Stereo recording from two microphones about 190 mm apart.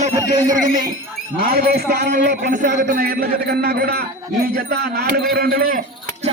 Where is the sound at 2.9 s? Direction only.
50° right (ahead or behind).